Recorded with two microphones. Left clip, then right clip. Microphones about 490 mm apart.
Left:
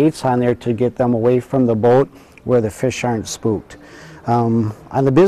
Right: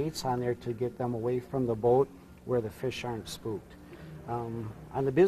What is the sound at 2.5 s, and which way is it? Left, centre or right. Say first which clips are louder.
Speech: left 15 dB; left.